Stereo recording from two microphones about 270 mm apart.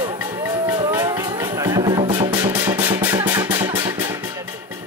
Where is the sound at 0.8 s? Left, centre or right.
Centre.